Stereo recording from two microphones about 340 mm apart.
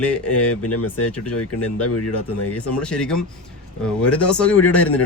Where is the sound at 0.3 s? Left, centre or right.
Left.